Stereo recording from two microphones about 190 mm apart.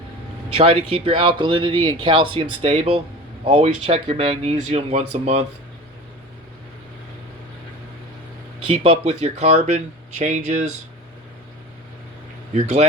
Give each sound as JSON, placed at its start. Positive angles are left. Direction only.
{"t": 0.5, "sound": "speech", "side_deg": -30}
{"t": 8.8, "sound": "speech", "side_deg": -30}